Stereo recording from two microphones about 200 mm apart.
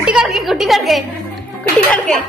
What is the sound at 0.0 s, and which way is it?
A woman's voice, centre (ahead or behind).